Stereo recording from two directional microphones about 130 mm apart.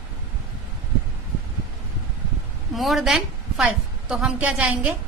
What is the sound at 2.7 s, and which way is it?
A woman's voice, centre (ahead or behind).